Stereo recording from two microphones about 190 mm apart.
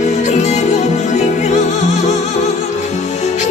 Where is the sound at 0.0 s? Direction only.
40° left (ahead or behind).